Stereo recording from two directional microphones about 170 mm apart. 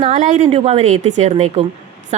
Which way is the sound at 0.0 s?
40° right (ahead or behind).